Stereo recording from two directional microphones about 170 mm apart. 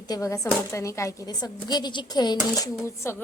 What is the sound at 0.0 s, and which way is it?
A woman's voice, 20° left (ahead or behind).